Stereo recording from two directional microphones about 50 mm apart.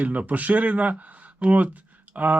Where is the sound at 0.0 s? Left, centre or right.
Right.